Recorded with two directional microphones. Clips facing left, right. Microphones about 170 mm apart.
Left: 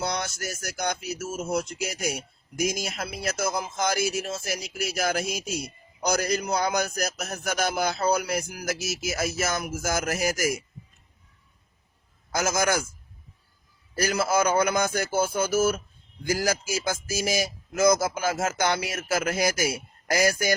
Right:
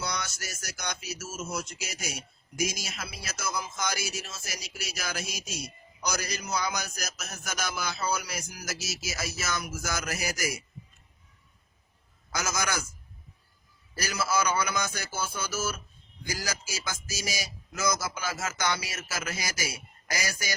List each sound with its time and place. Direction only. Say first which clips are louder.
0.0 s a man's voice: left 6 dB; 55° left (ahead or behind)
12.3 s a man's voice: left 7 dB; 50° left (ahead or behind)
13.9 s a man's voice: left 6 dB; 55° left (ahead or behind)